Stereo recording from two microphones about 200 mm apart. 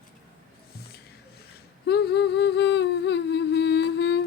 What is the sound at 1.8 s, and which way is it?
Humming, 55° left (ahead or behind).